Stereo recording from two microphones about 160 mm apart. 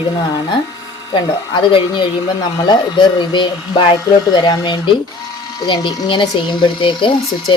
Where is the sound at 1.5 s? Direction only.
30° left (ahead or behind).